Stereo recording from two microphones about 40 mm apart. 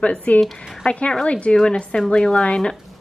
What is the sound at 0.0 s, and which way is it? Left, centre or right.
A woman's voice, left.